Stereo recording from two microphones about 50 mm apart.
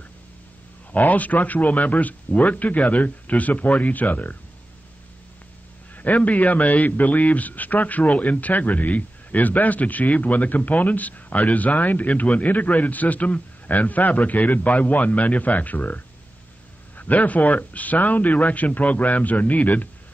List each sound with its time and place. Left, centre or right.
0.9 s a man's voice: left
5.9 s a man's voice: left